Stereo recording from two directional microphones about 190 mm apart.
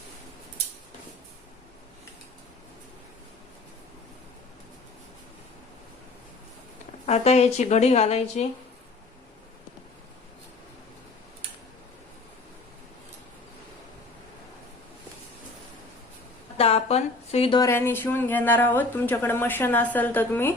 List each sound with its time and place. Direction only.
7.0 s speech: 35° left (ahead or behind)
16.6 s a sound: 30° left (ahead or behind)
17.6 s speech: 10° left (ahead or behind)